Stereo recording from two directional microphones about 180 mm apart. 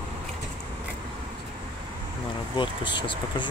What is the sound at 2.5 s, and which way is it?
Speech, 25° left (ahead or behind).